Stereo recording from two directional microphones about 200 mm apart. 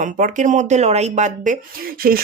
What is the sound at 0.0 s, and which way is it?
Speech, 40° right (ahead or behind).